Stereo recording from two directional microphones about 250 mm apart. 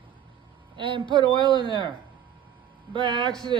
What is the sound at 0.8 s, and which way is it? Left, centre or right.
Speech, centre.